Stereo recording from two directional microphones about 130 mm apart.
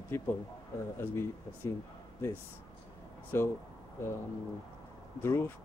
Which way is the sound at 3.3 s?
20° left (ahead or behind).